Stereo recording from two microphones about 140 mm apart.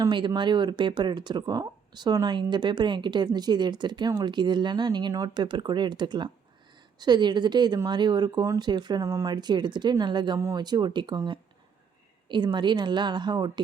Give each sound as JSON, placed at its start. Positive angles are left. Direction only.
{"t": 0.1, "sound": "speech", "side_deg": -35}
{"t": 9.0, "sound": "speech", "side_deg": -20}
{"t": 9.3, "sound": "speech", "side_deg": -30}